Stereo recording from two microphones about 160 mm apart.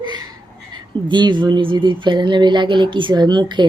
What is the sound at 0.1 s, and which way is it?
Speech, 25° right (ahead or behind).